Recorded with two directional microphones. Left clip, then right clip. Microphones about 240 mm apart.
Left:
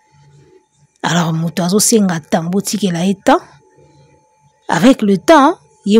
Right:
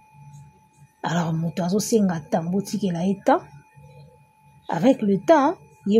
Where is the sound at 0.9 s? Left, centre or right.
Left.